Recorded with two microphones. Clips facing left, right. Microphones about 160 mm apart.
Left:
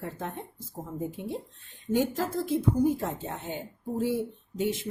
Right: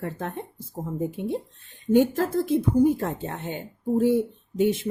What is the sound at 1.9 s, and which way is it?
Speech, 55° right (ahead or behind).